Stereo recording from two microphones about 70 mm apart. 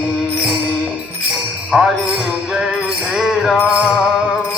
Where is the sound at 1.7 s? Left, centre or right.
Centre.